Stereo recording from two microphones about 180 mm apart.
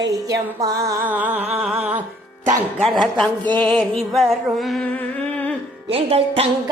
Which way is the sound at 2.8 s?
Centre (ahead or behind).